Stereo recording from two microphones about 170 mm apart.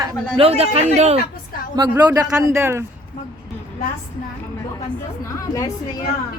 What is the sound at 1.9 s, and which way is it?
Speech, 15° right (ahead or behind).